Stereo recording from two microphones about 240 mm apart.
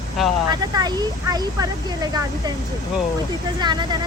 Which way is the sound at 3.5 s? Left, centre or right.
Centre.